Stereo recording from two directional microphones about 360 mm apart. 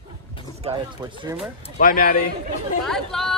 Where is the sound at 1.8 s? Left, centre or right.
Left.